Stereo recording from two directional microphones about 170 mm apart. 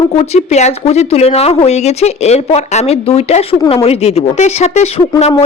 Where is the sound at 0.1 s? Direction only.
40° left (ahead or behind).